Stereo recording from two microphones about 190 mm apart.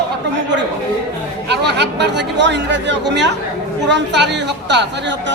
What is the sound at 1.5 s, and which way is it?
A woman's voice, 65° right (ahead or behind).